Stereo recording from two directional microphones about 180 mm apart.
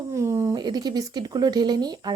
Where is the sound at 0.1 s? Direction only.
15° right (ahead or behind).